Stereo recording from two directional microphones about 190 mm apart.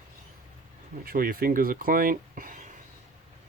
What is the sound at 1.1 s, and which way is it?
Speech, 50° right (ahead or behind).